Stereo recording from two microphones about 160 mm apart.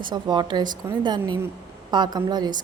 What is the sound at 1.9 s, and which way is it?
Speech, 25° right (ahead or behind).